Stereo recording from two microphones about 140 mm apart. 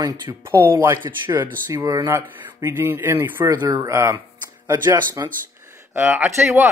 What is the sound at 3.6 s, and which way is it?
Speech, 25° right (ahead or behind).